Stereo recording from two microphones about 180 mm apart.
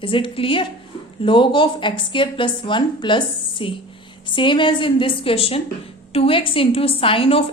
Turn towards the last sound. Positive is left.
turn(degrees=30)  # may be behind; listen again after turning